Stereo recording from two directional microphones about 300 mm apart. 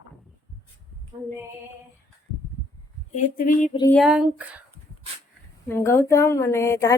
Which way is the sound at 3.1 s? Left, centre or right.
Left.